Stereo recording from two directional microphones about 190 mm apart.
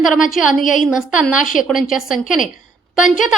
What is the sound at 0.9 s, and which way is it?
A woman's voice, 5° right (ahead or behind).